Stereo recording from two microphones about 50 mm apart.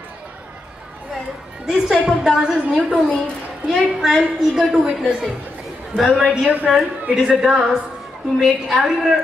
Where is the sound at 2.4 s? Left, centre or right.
Right.